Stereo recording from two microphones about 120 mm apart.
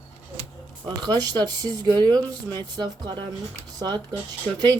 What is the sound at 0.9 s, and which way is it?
Speech, 35° right (ahead or behind).